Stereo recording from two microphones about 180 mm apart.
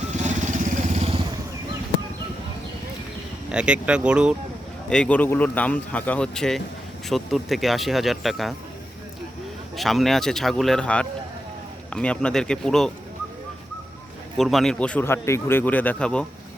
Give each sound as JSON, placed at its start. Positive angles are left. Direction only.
{"t": 0.1, "sound": "vehicle", "side_deg": -40}
{"t": 3.5, "sound": "speech", "side_deg": -5}
{"t": 4.9, "sound": "a man's voice", "side_deg": 5}
{"t": 9.7, "sound": "speech", "side_deg": 0}
{"t": 14.3, "sound": "a man's voice", "side_deg": 0}